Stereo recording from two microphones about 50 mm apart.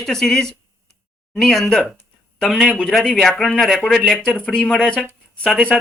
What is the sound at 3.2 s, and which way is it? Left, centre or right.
Speech, centre.